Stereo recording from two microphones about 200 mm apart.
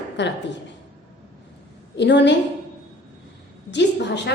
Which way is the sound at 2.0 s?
60° left (ahead or behind).